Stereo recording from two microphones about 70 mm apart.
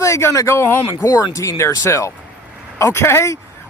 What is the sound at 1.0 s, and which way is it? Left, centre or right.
A man's voice, left.